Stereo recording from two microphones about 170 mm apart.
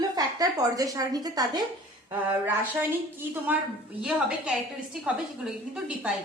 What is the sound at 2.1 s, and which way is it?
A woman's voice, 10° right (ahead or behind).